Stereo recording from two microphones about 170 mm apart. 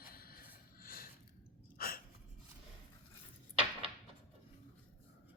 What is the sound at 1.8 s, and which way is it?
Gasp, 60° left (ahead or behind).